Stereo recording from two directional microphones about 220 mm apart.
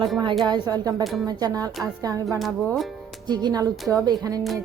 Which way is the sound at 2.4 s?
Centre (ahead or behind).